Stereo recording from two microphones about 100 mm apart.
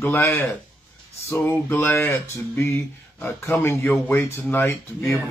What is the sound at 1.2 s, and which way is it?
Speech, 20° left (ahead or behind).